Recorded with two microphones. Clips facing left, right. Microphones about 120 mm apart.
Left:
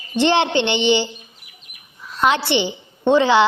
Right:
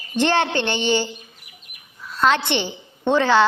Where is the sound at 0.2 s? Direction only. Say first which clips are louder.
Left 3 dB; 15° left (ahead or behind).